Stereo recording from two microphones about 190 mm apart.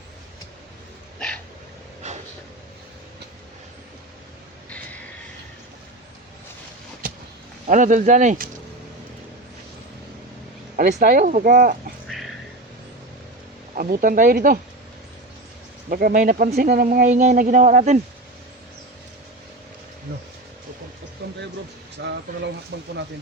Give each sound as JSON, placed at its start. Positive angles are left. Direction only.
{"t": 7.7, "sound": "speech", "side_deg": -40}
{"t": 10.8, "sound": "speech", "side_deg": -45}
{"t": 12.0, "sound": "a sound", "side_deg": 0}
{"t": 13.7, "sound": "speech", "side_deg": -45}
{"t": 15.9, "sound": "speech", "side_deg": -50}
{"t": 21.2, "sound": "a sound", "side_deg": -60}